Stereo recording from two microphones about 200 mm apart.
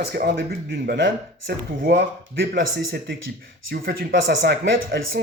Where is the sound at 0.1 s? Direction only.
50° right (ahead or behind).